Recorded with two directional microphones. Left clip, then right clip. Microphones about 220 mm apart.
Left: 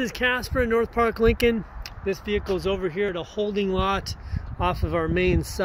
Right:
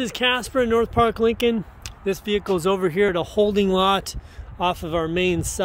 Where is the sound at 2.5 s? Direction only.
45° right (ahead or behind).